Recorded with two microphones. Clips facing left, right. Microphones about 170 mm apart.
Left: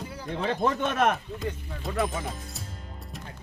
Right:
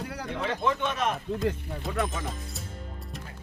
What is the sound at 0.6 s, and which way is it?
Speech, 45° left (ahead or behind).